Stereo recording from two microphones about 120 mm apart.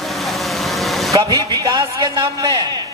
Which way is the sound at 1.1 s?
30° right (ahead or behind).